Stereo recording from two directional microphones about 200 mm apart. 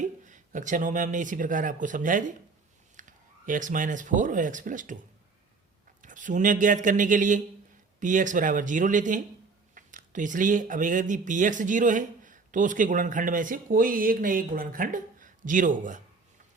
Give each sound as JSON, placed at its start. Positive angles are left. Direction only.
{"t": 0.0, "sound": "a man's voice", "side_deg": -40}
{"t": 6.0, "sound": "speech", "side_deg": -40}